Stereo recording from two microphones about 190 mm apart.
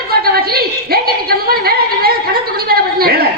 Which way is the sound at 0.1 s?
55° right (ahead or behind).